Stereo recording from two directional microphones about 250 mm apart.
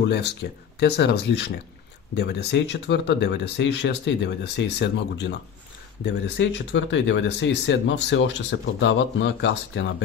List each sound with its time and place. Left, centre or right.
0.1 s speech: left